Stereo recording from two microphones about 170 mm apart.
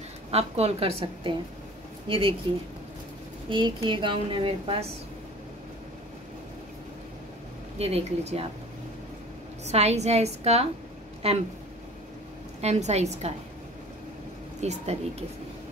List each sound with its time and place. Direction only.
0.3 s a woman's voice: 35° right (ahead or behind)
3.4 s a woman's voice: 30° right (ahead or behind)
7.8 s a woman's voice: 40° right (ahead or behind)
9.7 s a woman's voice: 40° right (ahead or behind)
12.6 s a woman's voice: 40° right (ahead or behind)
14.6 s a woman's voice: 40° right (ahead or behind)